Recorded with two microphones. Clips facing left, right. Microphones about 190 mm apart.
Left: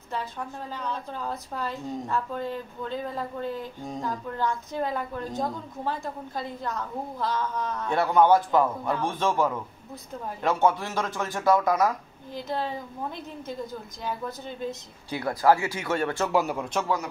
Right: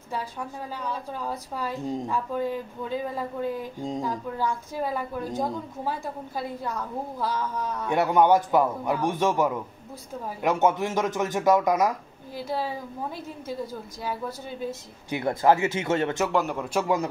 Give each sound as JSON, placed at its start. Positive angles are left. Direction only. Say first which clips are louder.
{"t": 0.1, "sound": "a woman's voice", "louder": "even", "side_deg": -10}
{"t": 15.0, "sound": "speech", "louder": "right 1 dB", "side_deg": -20}
{"t": 16.3, "sound": "speech", "louder": "even", "side_deg": 0}